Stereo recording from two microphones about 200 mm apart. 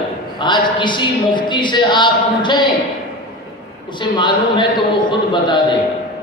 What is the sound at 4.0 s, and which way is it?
A man's voice, 25° left (ahead or behind).